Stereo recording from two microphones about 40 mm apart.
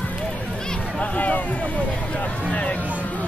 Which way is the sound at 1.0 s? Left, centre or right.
Left.